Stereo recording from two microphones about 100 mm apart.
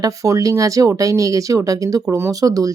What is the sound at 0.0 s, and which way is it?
Speech, 35° right (ahead or behind).